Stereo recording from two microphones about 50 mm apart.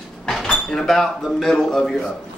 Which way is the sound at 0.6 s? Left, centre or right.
Centre.